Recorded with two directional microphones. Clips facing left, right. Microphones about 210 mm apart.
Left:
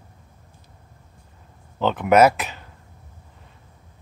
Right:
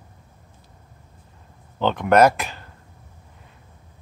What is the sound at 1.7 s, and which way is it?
Speech, 5° left (ahead or behind).